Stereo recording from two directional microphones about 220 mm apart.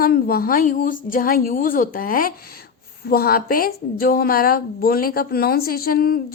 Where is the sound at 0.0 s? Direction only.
45° left (ahead or behind).